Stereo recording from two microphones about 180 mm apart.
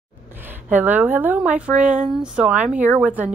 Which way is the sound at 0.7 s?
10° right (ahead or behind).